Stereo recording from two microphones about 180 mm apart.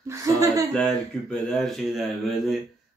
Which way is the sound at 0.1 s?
20° right (ahead or behind).